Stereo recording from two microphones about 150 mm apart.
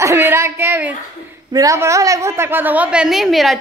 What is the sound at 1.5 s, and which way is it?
A man's voice, 20° right (ahead or behind).